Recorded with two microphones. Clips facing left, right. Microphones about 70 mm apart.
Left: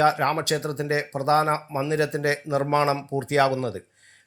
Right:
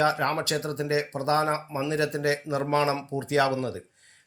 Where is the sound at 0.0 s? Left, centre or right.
Left.